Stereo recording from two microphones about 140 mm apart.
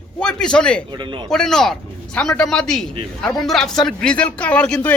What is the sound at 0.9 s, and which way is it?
Speech, 35° right (ahead or behind).